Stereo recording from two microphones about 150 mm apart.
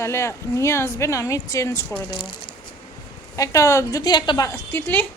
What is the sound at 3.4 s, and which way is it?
Speech, 20° left (ahead or behind).